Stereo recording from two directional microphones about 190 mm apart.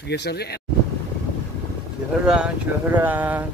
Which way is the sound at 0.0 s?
60° left (ahead or behind).